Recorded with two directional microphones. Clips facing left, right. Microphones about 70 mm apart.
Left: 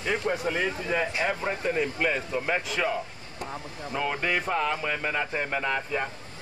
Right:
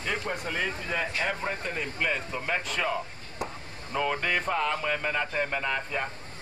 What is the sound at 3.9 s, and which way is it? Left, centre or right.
Speech, centre.